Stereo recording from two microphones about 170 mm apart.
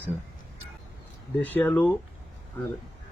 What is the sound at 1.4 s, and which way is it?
Speech, 10° left (ahead or behind).